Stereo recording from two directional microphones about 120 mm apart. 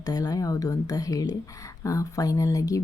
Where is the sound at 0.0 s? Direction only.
30° left (ahead or behind).